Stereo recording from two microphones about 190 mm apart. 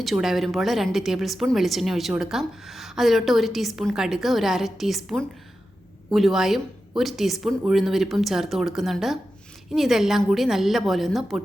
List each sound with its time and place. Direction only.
0.0 s a woman's voice: centre (ahead or behind)